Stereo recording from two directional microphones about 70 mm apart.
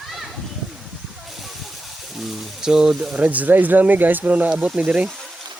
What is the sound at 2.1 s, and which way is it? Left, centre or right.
Speech, centre.